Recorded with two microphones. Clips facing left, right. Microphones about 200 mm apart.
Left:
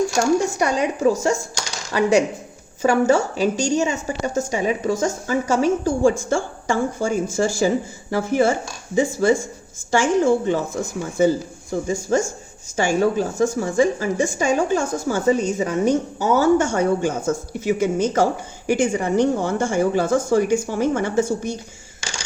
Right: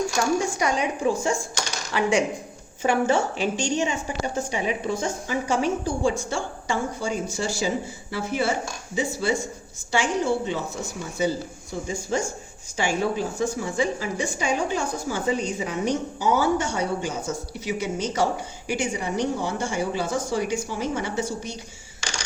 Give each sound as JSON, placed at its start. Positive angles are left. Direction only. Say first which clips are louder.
{"t": 0.2, "sound": "a woman's voice", "louder": "left 4 dB", "side_deg": 40}